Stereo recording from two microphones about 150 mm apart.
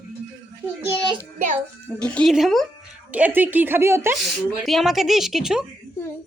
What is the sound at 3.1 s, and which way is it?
A woman's voice, 10° right (ahead or behind).